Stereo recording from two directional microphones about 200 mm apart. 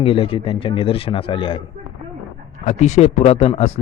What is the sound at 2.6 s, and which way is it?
Speech, 35° left (ahead or behind).